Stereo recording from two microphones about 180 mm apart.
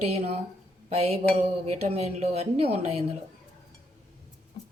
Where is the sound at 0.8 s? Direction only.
35° right (ahead or behind).